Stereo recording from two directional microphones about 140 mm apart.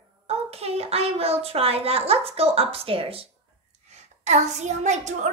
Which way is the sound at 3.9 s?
55° right (ahead or behind).